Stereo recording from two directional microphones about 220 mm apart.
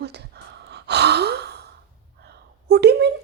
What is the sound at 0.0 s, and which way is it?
Gasp, 50° right (ahead or behind).